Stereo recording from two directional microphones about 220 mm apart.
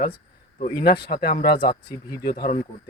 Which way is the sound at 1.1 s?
45° left (ahead or behind).